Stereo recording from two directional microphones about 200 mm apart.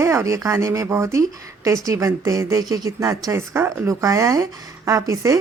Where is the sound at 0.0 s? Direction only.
15° right (ahead or behind).